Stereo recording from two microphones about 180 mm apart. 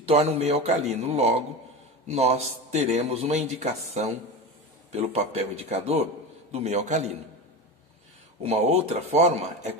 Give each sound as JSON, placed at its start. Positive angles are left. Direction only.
{"t": 0.0, "sound": "a man's voice", "side_deg": -35}
{"t": 8.4, "sound": "a man's voice", "side_deg": -35}